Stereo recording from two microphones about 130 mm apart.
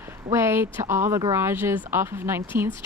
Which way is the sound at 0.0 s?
20° right (ahead or behind).